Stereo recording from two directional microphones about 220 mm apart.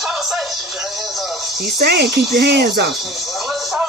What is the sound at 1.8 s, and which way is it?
Speech, 45° right (ahead or behind).